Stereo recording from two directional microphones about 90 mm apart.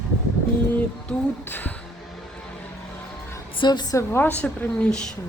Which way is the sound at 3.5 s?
60° left (ahead or behind).